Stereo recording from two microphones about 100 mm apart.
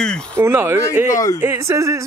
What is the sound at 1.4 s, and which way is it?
Speech, 30° right (ahead or behind).